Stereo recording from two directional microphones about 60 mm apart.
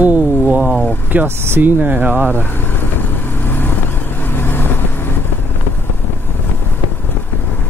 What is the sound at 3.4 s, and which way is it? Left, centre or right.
Vehicle, left.